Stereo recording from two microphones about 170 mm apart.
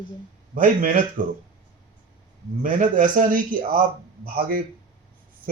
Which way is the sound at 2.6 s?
50° right (ahead or behind).